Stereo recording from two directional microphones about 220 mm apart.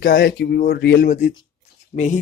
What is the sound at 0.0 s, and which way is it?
Speech, 45° left (ahead or behind).